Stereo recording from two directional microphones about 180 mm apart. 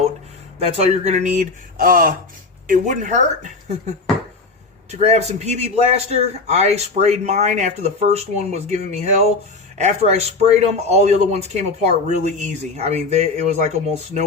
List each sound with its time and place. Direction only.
0.6 s speech: 35° right (ahead or behind)
4.9 s speech: 35° right (ahead or behind)